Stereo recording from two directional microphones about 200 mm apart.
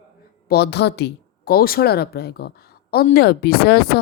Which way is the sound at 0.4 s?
55° left (ahead or behind).